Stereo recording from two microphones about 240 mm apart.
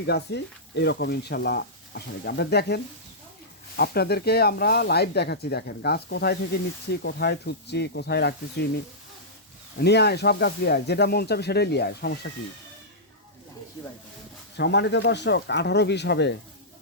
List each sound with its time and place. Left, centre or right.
0.0 s speech: left
14.5 s speech: left